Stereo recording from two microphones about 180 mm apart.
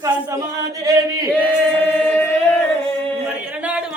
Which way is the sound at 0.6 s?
20° right (ahead or behind).